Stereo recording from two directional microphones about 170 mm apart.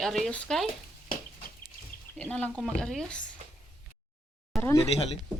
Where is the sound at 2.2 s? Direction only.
10° left (ahead or behind).